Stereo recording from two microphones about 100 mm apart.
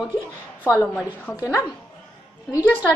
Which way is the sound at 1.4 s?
30° left (ahead or behind).